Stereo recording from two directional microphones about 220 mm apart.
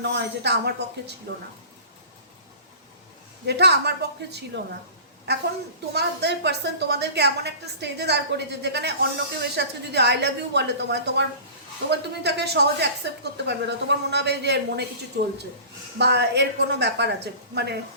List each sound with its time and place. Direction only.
0.0 s a woman's voice: 50° right (ahead or behind)
3.4 s a woman's voice: 50° right (ahead or behind)
5.3 s a woman's voice: 50° right (ahead or behind)